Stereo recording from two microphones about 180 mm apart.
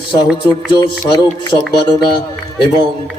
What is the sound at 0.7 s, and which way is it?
Speech, 25° left (ahead or behind).